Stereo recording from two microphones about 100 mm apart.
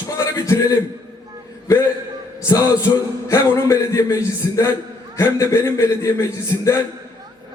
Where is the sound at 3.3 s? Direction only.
30° left (ahead or behind).